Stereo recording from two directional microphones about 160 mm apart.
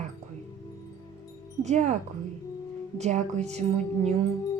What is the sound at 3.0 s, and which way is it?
Speech, 45° right (ahead or behind).